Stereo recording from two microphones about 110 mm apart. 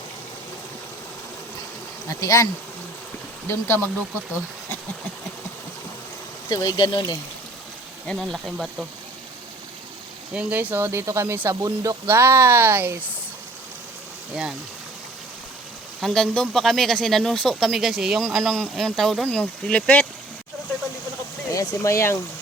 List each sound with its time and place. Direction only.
2.0 s speech: 30° left (ahead or behind)
6.5 s speech: 35° left (ahead or behind)
8.0 s speech: centre (ahead or behind)
10.3 s speech: 15° right (ahead or behind)
16.0 s speech: centre (ahead or behind)
21.5 s speech: 30° left (ahead or behind)